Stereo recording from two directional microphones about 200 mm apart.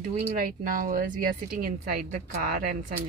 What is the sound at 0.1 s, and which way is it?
Speech, 45° right (ahead or behind).